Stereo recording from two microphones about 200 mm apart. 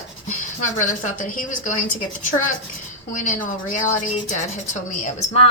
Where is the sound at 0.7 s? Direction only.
40° left (ahead or behind).